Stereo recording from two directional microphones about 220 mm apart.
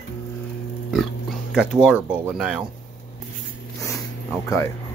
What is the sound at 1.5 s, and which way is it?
Speech, centre (ahead or behind).